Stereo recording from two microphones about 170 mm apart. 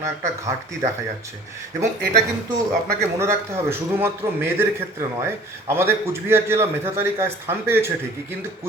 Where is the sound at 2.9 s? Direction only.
15° right (ahead or behind).